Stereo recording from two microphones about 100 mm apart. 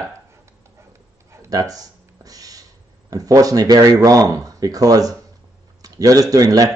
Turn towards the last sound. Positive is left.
turn(degrees=-35)  # may be behind; listen again after turning